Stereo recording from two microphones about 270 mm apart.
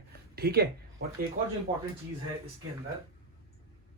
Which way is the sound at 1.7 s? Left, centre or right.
Right.